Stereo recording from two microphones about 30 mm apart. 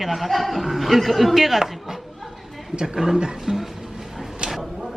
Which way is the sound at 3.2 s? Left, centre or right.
Right.